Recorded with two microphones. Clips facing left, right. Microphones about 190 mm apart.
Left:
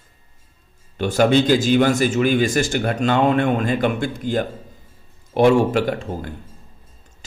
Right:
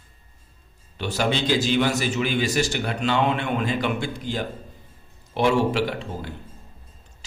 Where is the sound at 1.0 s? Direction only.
50° left (ahead or behind).